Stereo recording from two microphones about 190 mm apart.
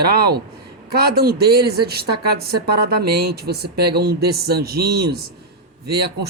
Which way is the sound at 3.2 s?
55° right (ahead or behind).